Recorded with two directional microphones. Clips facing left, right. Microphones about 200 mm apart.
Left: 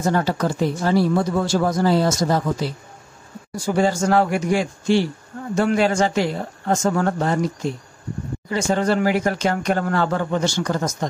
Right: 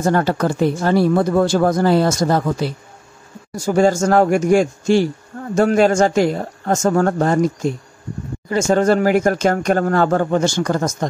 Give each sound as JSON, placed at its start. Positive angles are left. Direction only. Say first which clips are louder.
{"t": 0.0, "sound": "speech", "louder": "right 3 dB", "side_deg": -55}
{"t": 3.5, "sound": "speech", "louder": "right 5 dB", "side_deg": -45}